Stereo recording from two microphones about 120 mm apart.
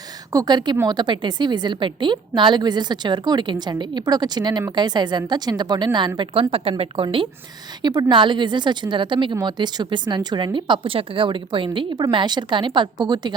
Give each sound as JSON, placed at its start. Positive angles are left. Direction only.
{"t": 0.3, "sound": "a woman's voice", "side_deg": -35}